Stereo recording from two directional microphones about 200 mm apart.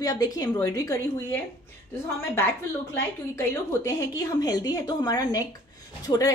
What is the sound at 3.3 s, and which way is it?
A woman's voice, 15° left (ahead or behind).